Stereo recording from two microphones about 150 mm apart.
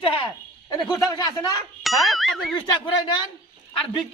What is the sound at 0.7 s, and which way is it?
Speech, 25° left (ahead or behind).